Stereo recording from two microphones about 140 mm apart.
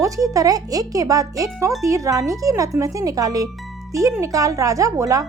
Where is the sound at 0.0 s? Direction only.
25° right (ahead or behind).